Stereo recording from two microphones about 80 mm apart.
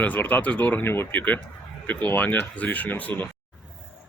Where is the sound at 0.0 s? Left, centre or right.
Left.